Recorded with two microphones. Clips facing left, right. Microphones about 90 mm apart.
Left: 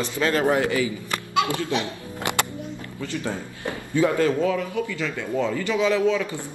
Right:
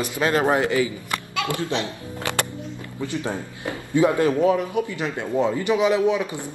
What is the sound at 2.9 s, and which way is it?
Speech, 20° right (ahead or behind).